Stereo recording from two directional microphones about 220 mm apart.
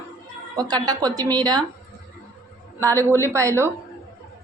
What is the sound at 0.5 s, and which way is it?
A woman's voice, 20° right (ahead or behind).